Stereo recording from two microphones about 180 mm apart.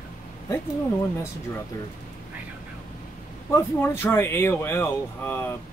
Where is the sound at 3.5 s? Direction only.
15° left (ahead or behind).